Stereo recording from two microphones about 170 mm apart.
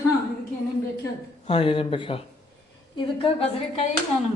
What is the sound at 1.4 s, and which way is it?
A woman's voice, 30° left (ahead or behind).